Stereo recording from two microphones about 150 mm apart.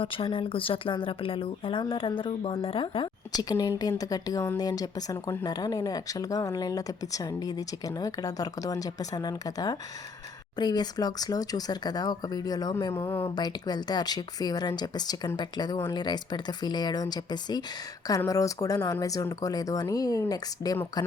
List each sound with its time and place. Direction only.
0.0 s speech: 35° left (ahead or behind); by 13.2 s 15° left (ahead or behind)
13.3 s speech: 25° left (ahead or behind)